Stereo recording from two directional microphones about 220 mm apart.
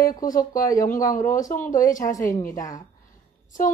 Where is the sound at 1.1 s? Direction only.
35° left (ahead or behind).